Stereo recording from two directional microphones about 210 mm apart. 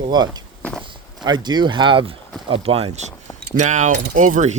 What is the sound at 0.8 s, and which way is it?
Speech, 20° right (ahead or behind).